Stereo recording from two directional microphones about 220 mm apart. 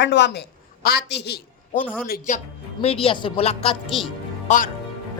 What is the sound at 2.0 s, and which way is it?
Speech, 40° left (ahead or behind).